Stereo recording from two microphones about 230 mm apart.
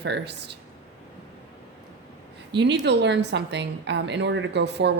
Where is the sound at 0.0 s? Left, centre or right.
Right.